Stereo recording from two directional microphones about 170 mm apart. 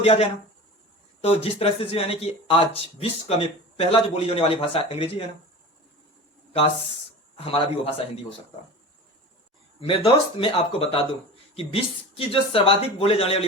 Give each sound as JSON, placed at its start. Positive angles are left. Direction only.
{"t": 0.0, "sound": "speech", "side_deg": 35}
{"t": 7.3, "sound": "speech", "side_deg": 35}
{"t": 9.8, "sound": "speech", "side_deg": 35}